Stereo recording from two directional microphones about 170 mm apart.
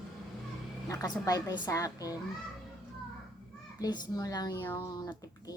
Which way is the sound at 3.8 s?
20° left (ahead or behind).